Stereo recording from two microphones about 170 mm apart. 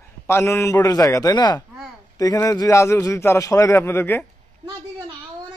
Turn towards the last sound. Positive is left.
turn(degrees=15)  # may be behind; listen again after turning